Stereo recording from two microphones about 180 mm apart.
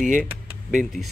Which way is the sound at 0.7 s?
Centre (ahead or behind).